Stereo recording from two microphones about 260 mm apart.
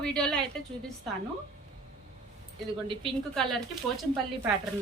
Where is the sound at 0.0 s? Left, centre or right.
Centre.